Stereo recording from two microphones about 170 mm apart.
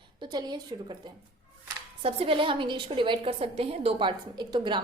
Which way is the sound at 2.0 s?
30° right (ahead or behind).